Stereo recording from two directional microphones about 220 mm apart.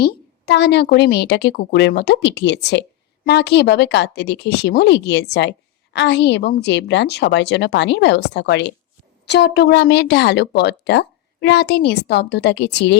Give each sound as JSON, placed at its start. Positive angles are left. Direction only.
{"t": 0.0, "sound": "speech", "side_deg": 50}